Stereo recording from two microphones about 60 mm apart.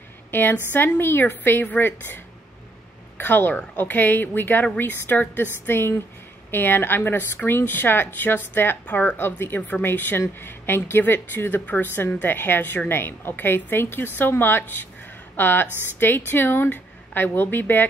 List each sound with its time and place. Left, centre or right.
0.3 s speech: left